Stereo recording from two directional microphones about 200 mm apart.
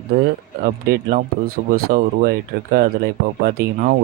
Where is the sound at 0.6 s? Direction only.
50° right (ahead or behind).